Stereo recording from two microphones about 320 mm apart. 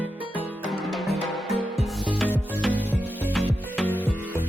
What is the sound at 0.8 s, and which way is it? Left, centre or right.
Music, centre.